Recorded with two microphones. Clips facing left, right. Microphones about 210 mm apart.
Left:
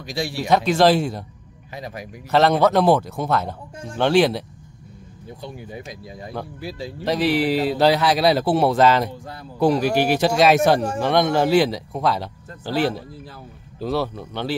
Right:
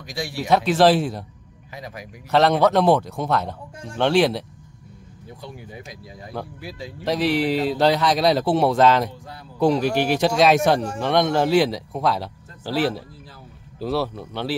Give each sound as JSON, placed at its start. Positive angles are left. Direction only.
{"t": 0.0, "sound": "a man's voice", "side_deg": 30}
{"t": 0.4, "sound": "speech", "side_deg": 0}
{"t": 1.7, "sound": "a man's voice", "side_deg": 30}
{"t": 2.3, "sound": "speech", "side_deg": 0}
{"t": 6.6, "sound": "speech", "side_deg": 30}
{"t": 7.1, "sound": "speech", "side_deg": 0}